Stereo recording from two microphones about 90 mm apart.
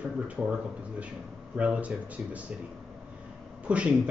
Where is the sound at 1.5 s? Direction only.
15° right (ahead or behind).